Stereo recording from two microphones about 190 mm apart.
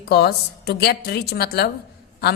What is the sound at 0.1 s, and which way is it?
A woman's voice, 60° left (ahead or behind).